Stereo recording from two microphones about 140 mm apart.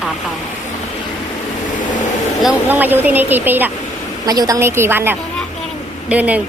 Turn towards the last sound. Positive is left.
turn(degrees=-10)  # may be behind; listen again after turning